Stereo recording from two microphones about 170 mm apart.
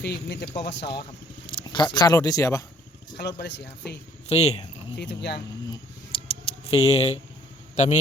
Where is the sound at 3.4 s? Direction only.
85° left.